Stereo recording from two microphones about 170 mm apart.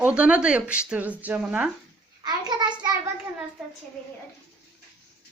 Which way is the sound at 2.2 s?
25° right (ahead or behind).